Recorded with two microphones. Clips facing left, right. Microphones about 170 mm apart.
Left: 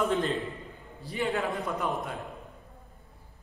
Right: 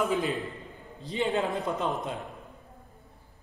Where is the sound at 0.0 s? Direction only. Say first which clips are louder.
Even; centre (ahead or behind).